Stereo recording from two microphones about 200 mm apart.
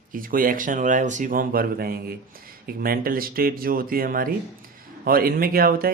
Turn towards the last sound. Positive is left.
turn(degrees=-45)  # may be behind; listen again after turning